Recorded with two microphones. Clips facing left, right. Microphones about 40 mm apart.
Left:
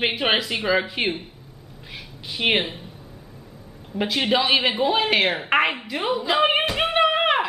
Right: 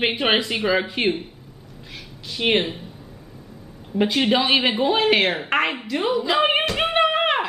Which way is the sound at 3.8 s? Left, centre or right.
Centre.